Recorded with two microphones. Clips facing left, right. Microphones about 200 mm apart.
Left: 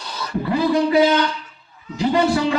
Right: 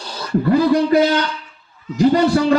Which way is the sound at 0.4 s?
45° right (ahead or behind).